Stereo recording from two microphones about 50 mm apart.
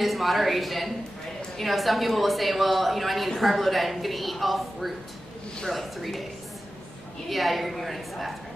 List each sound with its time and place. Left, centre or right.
0.0 s a woman's voice: centre
7.2 s a woman's voice: centre